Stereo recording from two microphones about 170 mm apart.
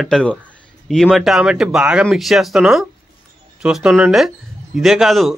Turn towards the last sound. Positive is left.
turn(degrees=0)  # may be behind; listen again after turning